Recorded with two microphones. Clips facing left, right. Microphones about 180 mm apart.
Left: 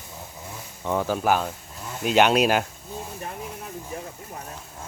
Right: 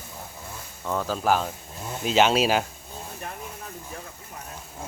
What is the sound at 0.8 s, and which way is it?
Speech, 15° left (ahead or behind).